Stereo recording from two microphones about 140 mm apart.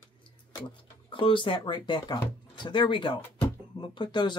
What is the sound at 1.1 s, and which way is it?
Speech, 35° left (ahead or behind).